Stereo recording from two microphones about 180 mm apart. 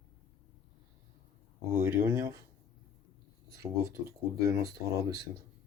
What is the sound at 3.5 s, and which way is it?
Speech, 15° right (ahead or behind).